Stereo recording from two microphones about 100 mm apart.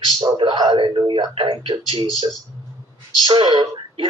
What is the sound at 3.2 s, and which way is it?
Speech, 50° right (ahead or behind).